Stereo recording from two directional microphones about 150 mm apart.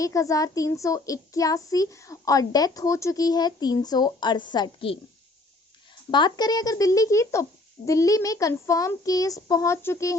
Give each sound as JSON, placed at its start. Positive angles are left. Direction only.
{"t": 0.0, "sound": "a child's voice", "side_deg": 20}
{"t": 6.1, "sound": "a child's voice", "side_deg": 30}